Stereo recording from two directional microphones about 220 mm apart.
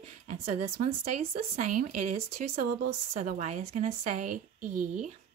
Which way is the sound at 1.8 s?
90° right.